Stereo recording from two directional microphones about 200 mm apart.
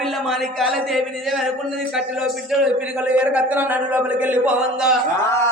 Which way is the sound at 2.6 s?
5° right (ahead or behind).